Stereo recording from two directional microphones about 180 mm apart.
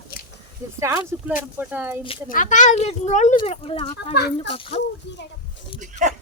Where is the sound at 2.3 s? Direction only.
45° left (ahead or behind); by 4.8 s 30° left (ahead or behind).